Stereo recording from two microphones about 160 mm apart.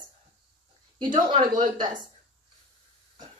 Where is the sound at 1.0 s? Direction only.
30° right (ahead or behind).